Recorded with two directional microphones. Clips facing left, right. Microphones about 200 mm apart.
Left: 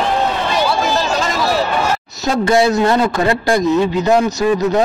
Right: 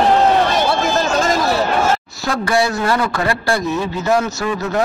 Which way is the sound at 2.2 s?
25° left (ahead or behind).